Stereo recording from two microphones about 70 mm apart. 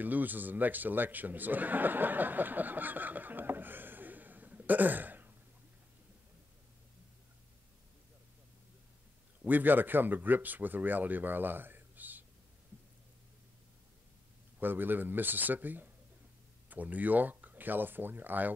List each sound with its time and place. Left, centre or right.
0.0 s a man's voice: right
9.5 s speech: right
14.6 s a man's voice: right